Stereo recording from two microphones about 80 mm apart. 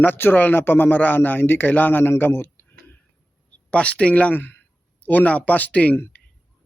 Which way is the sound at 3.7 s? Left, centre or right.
Centre.